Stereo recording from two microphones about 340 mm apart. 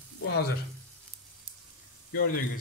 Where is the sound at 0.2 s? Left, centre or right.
Left.